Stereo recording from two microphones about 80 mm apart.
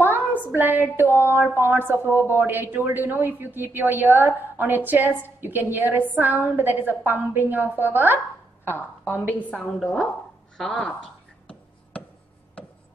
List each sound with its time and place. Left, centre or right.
0.3 s a woman's voice: right
8.6 s a woman's voice: left
9.8 s a woman's voice: centre